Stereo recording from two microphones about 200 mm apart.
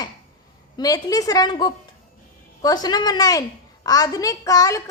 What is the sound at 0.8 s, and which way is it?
A woman's voice, 20° left (ahead or behind).